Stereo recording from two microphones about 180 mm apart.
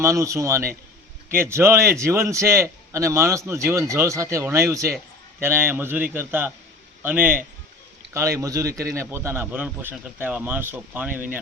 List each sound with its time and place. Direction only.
0.0 s a man's voice: 15° right (ahead or behind)